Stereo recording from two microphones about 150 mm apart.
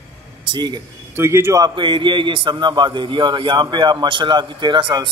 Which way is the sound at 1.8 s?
35° right (ahead or behind).